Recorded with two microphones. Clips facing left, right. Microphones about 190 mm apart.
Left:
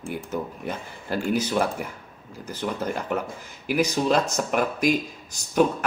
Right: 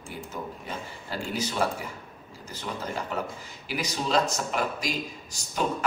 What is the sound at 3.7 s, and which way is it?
Speech, 55° left (ahead or behind).